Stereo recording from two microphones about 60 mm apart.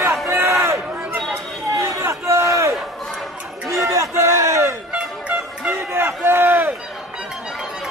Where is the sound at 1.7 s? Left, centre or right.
Right.